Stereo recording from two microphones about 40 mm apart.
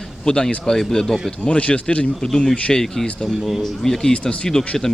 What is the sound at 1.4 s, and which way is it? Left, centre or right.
Speech, left.